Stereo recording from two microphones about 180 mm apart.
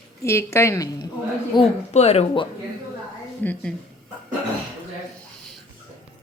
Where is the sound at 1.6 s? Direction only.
35° left (ahead or behind).